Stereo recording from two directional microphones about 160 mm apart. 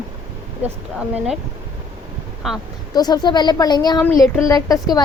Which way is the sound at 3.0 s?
25° left (ahead or behind).